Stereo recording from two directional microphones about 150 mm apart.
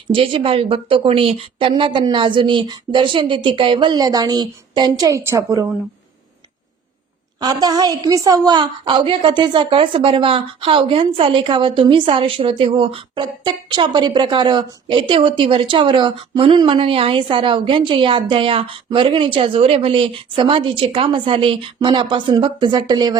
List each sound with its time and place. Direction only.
0.1 s a woman's voice: 35° right (ahead or behind); by 5.6 s 20° right (ahead or behind)
7.3 s a woman's voice: 25° right (ahead or behind)